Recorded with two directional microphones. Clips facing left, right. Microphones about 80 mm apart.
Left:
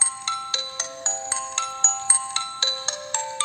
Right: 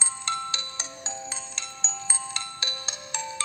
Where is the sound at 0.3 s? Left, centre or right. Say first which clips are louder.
Even; left.